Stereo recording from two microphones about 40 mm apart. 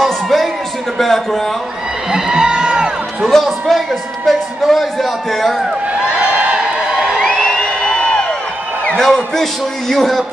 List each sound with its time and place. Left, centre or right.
0.0 s music: centre
0.9 s a man's voice: centre
2.1 s crowd: centre
3.3 s a man's voice: centre
4.3 s music: centre
6.0 s a sound: right
7.1 s music: centre
7.6 s a sound: centre
8.9 s a man's voice: centre